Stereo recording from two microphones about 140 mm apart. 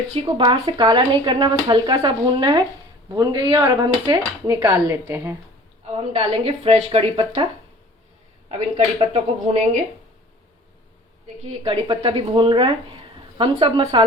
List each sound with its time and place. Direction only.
0.3 s speech: 35° right (ahead or behind)
4.9 s a woman's voice: 15° right (ahead or behind)
6.0 s speech: 50° right (ahead or behind)
9.0 s speech: 50° right (ahead or behind)
11.6 s speech: 40° right (ahead or behind)